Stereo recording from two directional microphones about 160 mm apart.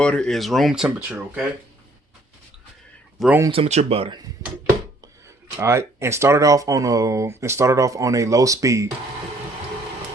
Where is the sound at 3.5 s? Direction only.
40° right (ahead or behind).